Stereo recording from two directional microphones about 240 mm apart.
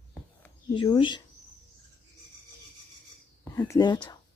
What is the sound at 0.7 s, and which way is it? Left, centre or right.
Speech, centre.